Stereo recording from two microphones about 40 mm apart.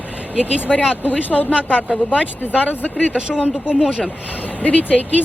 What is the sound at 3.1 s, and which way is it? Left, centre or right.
Speech, right.